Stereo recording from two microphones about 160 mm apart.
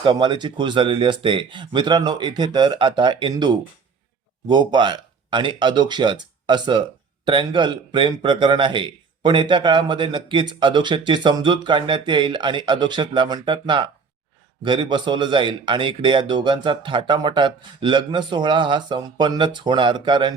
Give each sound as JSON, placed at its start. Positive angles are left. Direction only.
{"t": 0.0, "sound": "a man's voice", "side_deg": -30}